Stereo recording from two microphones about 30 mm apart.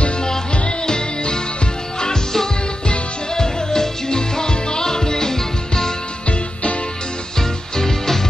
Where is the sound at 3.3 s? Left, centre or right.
Centre.